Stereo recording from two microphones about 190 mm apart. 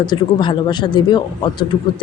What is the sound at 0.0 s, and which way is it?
Speech, 25° left (ahead or behind).